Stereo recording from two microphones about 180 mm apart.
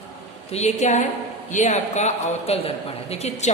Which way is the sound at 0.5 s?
40° left (ahead or behind).